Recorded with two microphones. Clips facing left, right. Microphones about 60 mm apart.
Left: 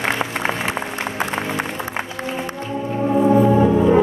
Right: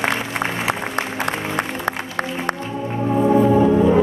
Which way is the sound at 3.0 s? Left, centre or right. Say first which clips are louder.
Left 1 dB; centre.